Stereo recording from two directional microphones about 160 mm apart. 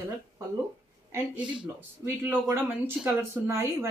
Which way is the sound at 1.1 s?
10° right (ahead or behind).